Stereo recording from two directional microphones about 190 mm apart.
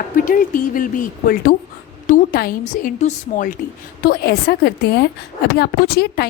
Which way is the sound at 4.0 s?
55° left (ahead or behind).